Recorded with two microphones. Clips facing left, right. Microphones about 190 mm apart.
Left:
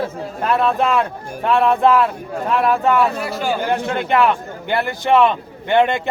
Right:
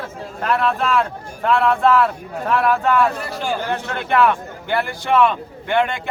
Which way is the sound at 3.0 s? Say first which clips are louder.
Left 1 dB; 5° left (ahead or behind).